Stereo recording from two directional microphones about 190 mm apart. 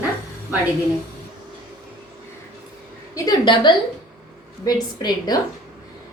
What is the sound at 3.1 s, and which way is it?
A woman's voice, 20° left (ahead or behind).